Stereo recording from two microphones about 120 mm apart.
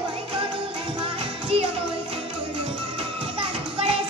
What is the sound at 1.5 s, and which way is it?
Music, 50° right (ahead or behind).